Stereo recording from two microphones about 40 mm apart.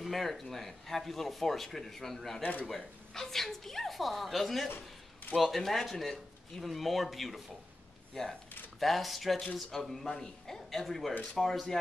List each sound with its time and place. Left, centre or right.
0.0 s speech: centre
4.6 s a sound: left
5.4 s speech: centre
8.2 s speech: centre